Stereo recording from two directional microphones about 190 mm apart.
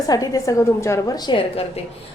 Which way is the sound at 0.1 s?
20° left (ahead or behind).